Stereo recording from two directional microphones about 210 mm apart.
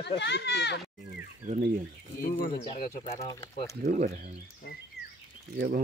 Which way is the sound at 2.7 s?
35° left (ahead or behind).